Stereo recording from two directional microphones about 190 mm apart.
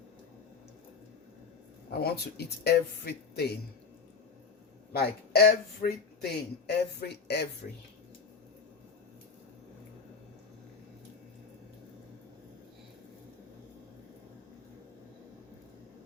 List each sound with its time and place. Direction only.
1.9 s speech: 55° left (ahead or behind)
4.9 s speech: 55° left (ahead or behind)
7.6 s speech: 45° left (ahead or behind)